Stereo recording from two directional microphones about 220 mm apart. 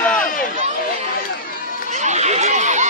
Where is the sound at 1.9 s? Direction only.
30° right (ahead or behind).